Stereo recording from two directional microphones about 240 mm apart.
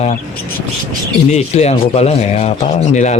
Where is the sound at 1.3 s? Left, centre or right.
Left.